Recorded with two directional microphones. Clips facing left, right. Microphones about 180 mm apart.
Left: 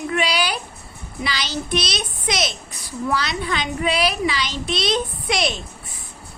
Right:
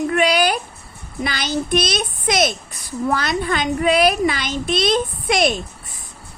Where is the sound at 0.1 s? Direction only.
50° right (ahead or behind).